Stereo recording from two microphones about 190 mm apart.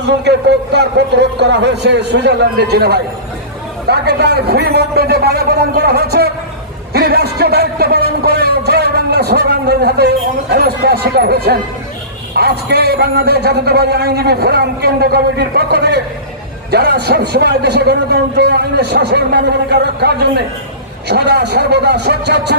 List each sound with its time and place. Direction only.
0.0 s a man's voice: 65° right (ahead or behind)